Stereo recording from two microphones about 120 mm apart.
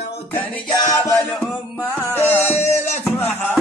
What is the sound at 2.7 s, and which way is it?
Music, 70° left (ahead or behind).